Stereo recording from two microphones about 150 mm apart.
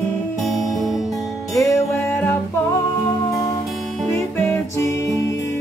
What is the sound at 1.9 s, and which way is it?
Music, 15° left (ahead or behind).